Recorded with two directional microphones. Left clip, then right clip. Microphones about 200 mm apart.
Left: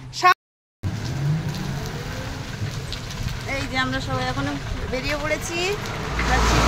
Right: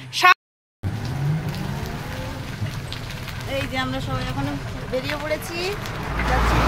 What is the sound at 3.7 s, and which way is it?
Vehicle, 15° left (ahead or behind).